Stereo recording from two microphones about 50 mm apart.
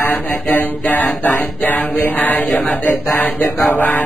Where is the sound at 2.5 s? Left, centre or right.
Centre.